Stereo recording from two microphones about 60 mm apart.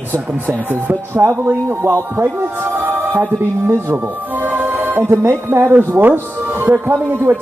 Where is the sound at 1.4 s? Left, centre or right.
Right.